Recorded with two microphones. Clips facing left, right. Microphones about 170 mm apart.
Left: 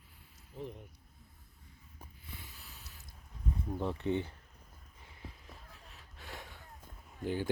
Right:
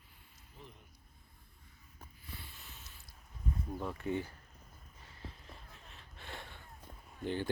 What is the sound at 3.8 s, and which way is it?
Speech, 25° left (ahead or behind).